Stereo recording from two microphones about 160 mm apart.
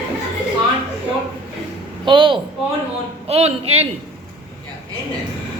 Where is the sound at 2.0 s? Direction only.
30° right (ahead or behind).